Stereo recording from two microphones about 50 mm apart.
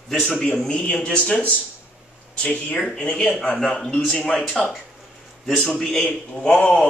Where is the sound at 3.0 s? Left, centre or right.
Left.